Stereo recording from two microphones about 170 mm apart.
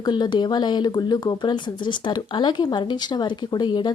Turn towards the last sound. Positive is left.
turn(degrees=25)  # may be behind; listen again after turning